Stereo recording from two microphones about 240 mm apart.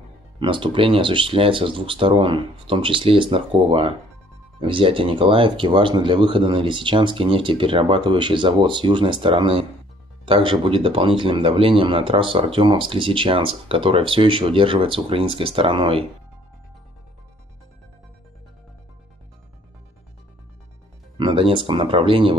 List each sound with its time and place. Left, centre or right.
0.4 s speech: right
21.2 s speech: right